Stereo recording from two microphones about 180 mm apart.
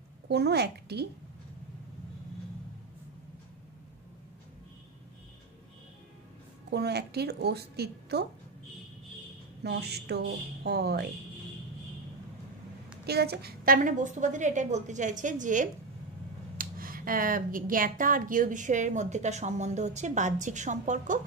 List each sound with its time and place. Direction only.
0.3 s a woman's voice: 70° right (ahead or behind)
6.7 s a woman's voice: 65° right (ahead or behind)
9.6 s a woman's voice: 65° right (ahead or behind)
13.0 s speech: 60° right (ahead or behind); by 21.2 s 45° right (ahead or behind)